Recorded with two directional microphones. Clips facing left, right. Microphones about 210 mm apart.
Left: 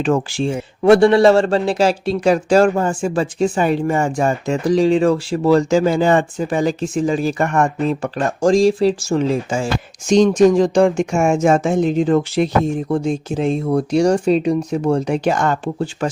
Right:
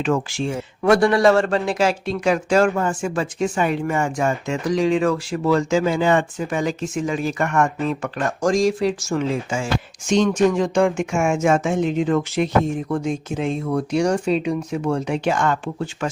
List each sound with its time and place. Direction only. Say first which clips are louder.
0.0 s speech: left 4 dB; 35° left (ahead or behind)